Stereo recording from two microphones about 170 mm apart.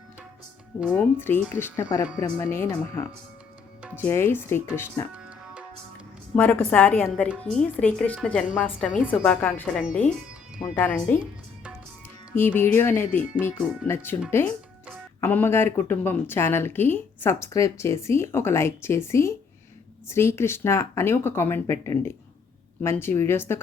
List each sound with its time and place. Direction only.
1.2 s a woman's voice: 10° left (ahead or behind)
6.3 s a woman's voice: 10° left (ahead or behind)
12.3 s a woman's voice: 10° left (ahead or behind)